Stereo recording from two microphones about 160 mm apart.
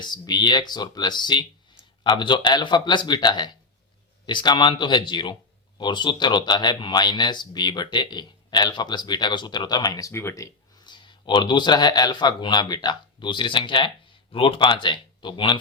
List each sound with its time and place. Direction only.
0.0 s speech: 25° left (ahead or behind)